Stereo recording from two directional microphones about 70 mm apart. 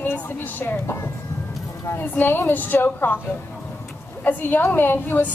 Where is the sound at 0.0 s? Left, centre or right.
Left.